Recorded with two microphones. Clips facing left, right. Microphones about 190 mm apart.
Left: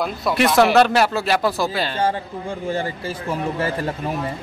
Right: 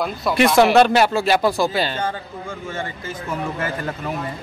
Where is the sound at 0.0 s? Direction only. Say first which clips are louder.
Right 1 dB; centre (ahead or behind).